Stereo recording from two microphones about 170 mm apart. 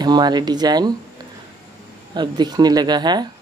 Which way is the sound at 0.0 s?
25° right (ahead or behind).